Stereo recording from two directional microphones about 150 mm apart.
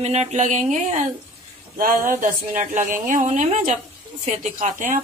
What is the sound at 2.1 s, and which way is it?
Speech, 60° right (ahead or behind).